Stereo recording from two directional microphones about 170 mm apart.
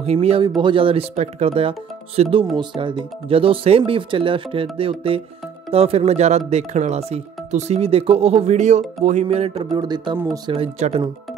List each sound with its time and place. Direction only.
0.0 s speech: 35° right (ahead or behind)
9.7 s speech: 25° right (ahead or behind)
10.5 s speech: 35° right (ahead or behind)